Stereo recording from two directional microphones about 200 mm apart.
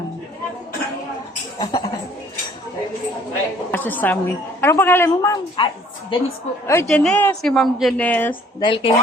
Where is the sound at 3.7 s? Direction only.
10° left (ahead or behind).